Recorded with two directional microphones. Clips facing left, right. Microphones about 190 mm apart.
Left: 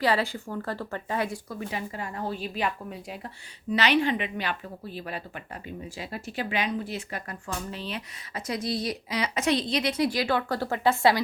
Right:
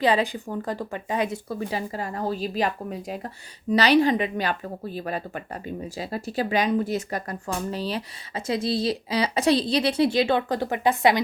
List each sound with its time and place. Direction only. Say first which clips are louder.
0.0 s speech: right 4 dB; 20° right (ahead or behind)